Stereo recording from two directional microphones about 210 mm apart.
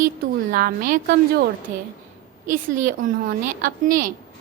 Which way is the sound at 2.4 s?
35° right (ahead or behind).